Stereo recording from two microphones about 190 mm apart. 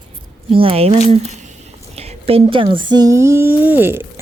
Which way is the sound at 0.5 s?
30° right (ahead or behind).